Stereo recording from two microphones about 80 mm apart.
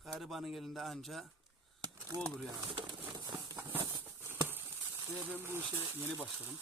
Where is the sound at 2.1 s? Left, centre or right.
Right.